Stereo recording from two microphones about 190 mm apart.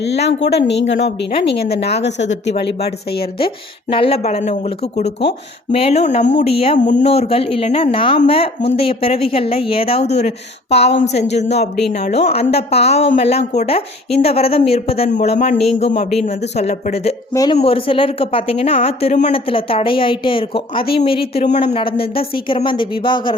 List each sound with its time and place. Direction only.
0.1 s a woman's voice: 65° left (ahead or behind)
3.3 s speech: 30° left (ahead or behind)
17.3 s speech: 20° left (ahead or behind)